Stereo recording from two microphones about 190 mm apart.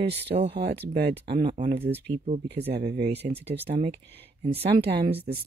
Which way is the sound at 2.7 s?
55° right (ahead or behind).